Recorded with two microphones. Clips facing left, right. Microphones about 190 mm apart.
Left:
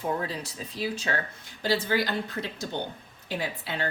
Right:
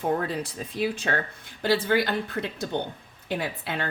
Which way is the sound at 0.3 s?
55° right (ahead or behind).